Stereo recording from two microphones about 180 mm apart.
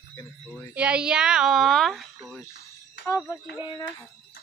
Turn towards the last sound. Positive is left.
turn(degrees=25)  # may be behind; listen again after turning